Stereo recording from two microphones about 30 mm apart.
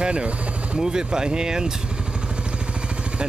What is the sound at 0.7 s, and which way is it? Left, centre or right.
Speech, right.